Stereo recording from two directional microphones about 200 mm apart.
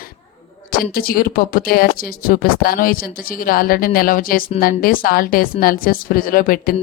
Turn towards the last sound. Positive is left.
turn(degrees=45)  # may be behind; listen again after turning